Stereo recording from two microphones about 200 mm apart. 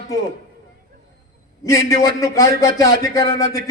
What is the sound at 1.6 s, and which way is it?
A man's voice, 15° left (ahead or behind).